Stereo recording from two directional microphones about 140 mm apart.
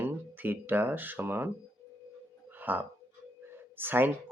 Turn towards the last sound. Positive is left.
turn(degrees=-15)  # may be behind; listen again after turning